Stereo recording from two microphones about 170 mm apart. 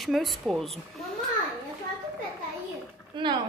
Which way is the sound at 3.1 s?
30° right (ahead or behind).